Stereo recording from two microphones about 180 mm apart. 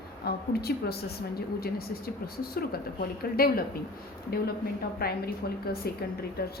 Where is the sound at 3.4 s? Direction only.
55° left (ahead or behind).